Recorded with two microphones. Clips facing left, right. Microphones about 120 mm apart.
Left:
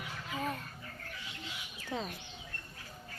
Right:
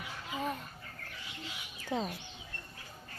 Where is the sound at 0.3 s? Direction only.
20° right (ahead or behind).